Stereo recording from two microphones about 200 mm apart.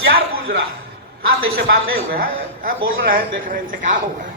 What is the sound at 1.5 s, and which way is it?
A man's voice, 50° right (ahead or behind).